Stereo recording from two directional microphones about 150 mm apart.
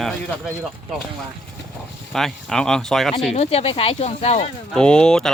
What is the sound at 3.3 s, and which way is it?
Speech, 45° left (ahead or behind).